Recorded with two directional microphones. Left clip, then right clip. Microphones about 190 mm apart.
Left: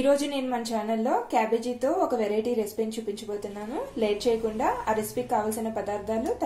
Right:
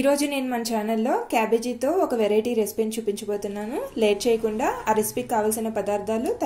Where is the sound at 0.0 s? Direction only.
40° right (ahead or behind).